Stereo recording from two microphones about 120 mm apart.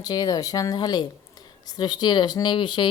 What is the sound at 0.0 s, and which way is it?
Speech, 35° left (ahead or behind).